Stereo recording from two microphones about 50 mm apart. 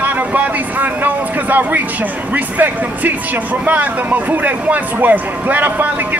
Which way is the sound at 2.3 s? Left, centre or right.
Right.